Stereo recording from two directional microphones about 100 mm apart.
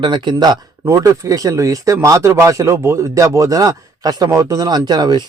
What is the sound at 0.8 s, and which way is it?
Speech, 30° right (ahead or behind).